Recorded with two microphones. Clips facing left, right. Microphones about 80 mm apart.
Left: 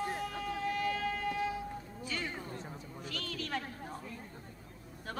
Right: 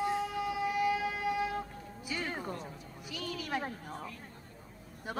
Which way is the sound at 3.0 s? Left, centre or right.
Centre.